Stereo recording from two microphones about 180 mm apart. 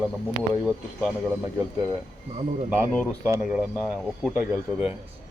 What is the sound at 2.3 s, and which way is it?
Speech, 35° right (ahead or behind).